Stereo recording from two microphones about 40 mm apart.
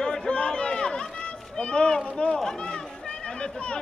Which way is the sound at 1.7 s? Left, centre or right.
Left.